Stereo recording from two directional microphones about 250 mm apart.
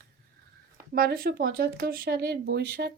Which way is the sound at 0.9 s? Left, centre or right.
Right.